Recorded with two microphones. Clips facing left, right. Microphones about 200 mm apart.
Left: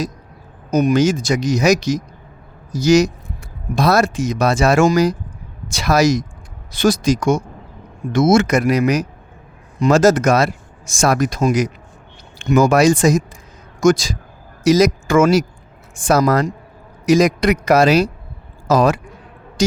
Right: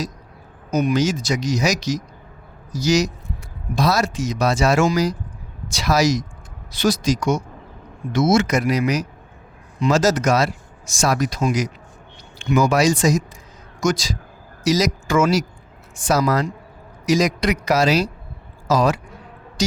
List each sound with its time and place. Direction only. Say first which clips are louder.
0.7 s speech: left 4 dB; 50° left (ahead or behind)
19.6 s music: left 5 dB; 50° left (ahead or behind)